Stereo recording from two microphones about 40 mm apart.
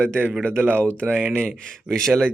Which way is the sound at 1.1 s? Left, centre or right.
Left.